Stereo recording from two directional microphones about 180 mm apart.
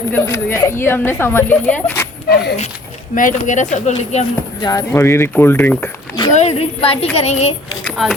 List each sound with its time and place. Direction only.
0.1 s speech: 10° left (ahead or behind)
2.3 s speech: 65° left (ahead or behind)
3.2 s speech: 45° left (ahead or behind)
4.6 s speech: 15° left (ahead or behind)
6.3 s speech: 35° left (ahead or behind)
7.9 s speech: centre (ahead or behind)